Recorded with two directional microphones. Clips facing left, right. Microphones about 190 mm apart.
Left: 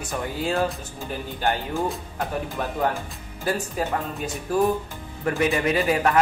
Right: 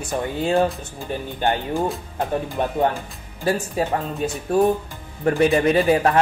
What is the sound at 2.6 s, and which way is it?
Speech, 25° right (ahead or behind).